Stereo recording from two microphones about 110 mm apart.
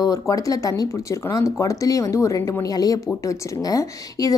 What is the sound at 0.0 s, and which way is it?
A woman's voice, 30° left (ahead or behind).